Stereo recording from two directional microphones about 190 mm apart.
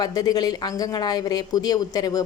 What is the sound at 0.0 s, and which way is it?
A woman's voice, 20° left (ahead or behind).